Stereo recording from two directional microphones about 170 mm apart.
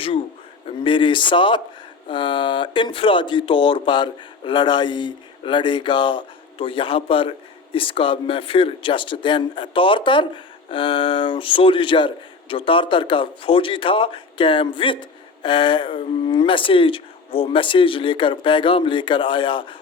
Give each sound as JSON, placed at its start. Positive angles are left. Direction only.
{"t": 0.9, "sound": "speech", "side_deg": 30}